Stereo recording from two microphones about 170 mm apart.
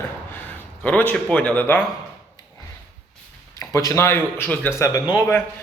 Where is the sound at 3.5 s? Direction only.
20° left (ahead or behind).